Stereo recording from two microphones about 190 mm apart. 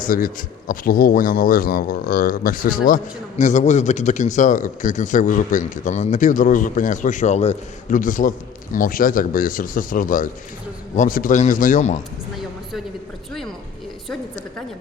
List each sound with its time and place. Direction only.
0.0 s a man's voice: 45° left (ahead or behind)